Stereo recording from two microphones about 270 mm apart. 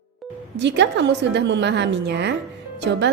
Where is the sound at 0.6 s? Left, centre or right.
Right.